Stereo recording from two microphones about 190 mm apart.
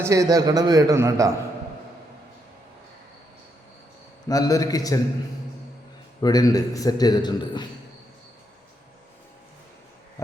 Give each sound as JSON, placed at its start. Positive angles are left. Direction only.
{"t": 0.0, "sound": "a man's voice", "side_deg": -15}
{"t": 4.3, "sound": "a man's voice", "side_deg": 20}
{"t": 6.2, "sound": "a man's voice", "side_deg": 20}